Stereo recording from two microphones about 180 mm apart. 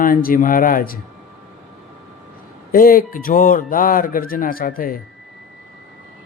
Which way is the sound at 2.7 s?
50° left (ahead or behind).